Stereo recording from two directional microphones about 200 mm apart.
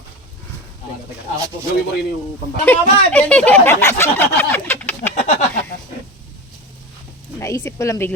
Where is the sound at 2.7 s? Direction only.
10° left (ahead or behind).